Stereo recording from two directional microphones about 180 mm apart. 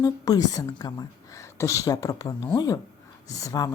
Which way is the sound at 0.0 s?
20° left (ahead or behind).